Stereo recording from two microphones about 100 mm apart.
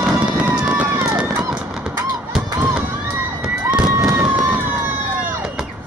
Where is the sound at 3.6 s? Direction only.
10° right (ahead or behind).